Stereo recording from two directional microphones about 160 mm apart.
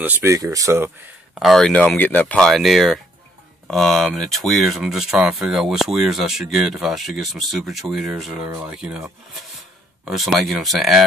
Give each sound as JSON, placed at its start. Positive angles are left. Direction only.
{"t": 0.0, "sound": "speech", "side_deg": -20}
{"t": 1.4, "sound": "speech", "side_deg": 0}